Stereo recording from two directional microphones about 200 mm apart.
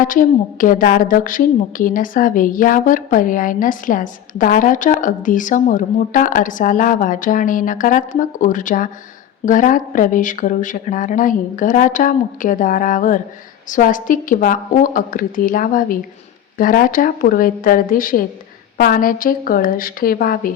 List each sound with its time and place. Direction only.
0.0 s a woman's voice: 40° left (ahead or behind)